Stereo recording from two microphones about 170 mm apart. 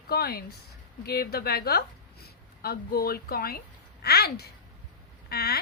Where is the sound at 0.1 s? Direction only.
65° left (ahead or behind).